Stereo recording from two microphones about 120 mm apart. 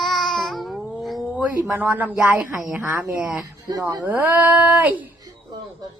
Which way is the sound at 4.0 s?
15° right (ahead or behind).